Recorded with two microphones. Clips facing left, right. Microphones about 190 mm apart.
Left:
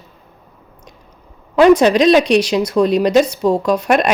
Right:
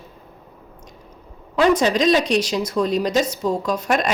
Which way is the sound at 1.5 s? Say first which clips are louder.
Left 7 dB; 65° left (ahead or behind).